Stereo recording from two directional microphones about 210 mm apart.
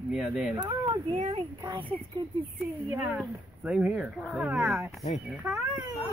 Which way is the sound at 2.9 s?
5° right (ahead or behind).